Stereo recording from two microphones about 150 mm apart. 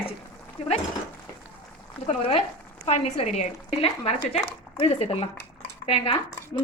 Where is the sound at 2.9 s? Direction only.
45° left (ahead or behind).